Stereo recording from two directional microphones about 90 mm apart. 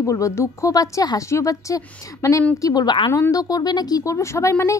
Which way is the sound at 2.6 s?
50° left (ahead or behind).